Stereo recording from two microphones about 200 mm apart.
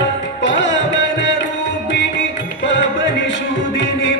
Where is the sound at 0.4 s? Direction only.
65° left (ahead or behind).